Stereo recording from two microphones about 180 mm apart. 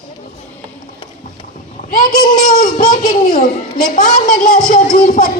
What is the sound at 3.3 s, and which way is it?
A woman's voice, 45° left (ahead or behind).